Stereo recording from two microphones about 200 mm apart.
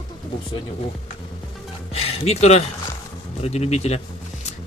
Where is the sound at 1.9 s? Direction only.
30° left (ahead or behind).